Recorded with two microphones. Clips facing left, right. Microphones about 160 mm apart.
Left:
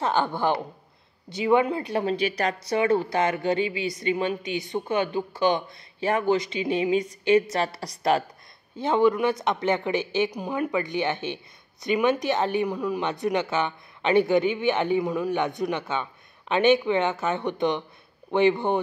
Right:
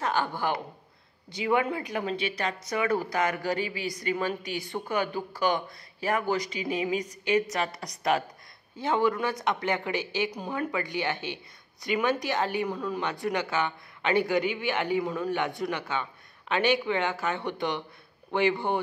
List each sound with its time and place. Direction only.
0.0 s a woman's voice: 25° left (ahead or behind)
1.3 s a woman's voice: 20° left (ahead or behind)
8.7 s a woman's voice: 20° left (ahead or behind)